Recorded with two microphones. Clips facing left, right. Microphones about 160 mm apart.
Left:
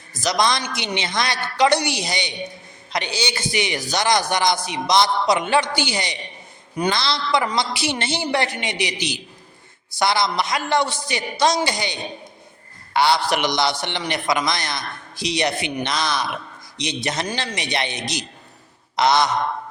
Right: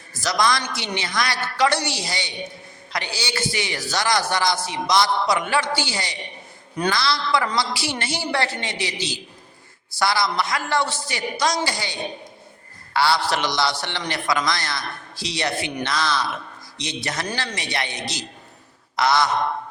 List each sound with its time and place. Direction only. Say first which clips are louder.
0.1 s a woman's voice: left 1 dB; 20° left (ahead or behind)